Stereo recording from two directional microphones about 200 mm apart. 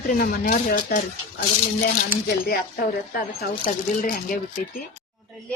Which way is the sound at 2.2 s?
50° left (ahead or behind).